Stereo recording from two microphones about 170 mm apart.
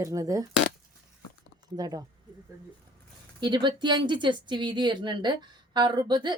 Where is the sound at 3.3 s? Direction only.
25° right (ahead or behind).